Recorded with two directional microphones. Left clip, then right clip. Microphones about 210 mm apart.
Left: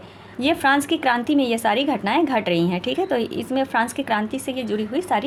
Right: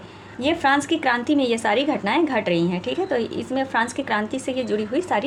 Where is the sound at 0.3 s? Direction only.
20° left (ahead or behind).